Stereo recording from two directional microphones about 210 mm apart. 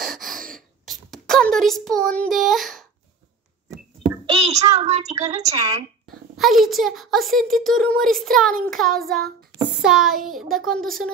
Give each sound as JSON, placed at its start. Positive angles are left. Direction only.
{"t": 0.0, "sound": "gasp", "side_deg": 0}
{"t": 0.8, "sound": "a sound", "side_deg": 0}
{"t": 4.3, "sound": "a child's voice", "side_deg": -30}
{"t": 6.3, "sound": "a woman's voice", "side_deg": 0}